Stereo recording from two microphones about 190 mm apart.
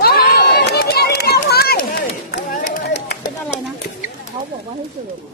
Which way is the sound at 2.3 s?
45° left (ahead or behind).